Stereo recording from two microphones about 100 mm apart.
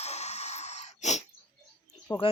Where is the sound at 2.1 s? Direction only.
25° left (ahead or behind).